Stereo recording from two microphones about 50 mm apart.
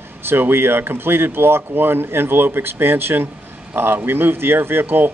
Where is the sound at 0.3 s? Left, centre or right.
Right.